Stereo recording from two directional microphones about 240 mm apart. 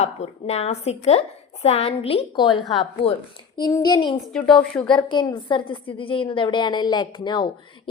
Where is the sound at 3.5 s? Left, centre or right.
Centre.